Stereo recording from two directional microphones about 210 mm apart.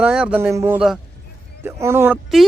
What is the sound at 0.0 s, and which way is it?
Speech, 5° right (ahead or behind).